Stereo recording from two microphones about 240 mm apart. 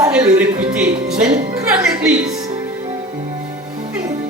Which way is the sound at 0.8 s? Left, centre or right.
Right.